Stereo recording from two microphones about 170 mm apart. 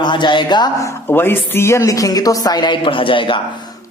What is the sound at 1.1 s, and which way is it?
A woman's voice, 15° left (ahead or behind).